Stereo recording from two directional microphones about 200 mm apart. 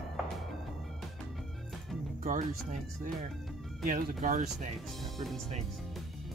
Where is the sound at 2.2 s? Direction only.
35° right (ahead or behind).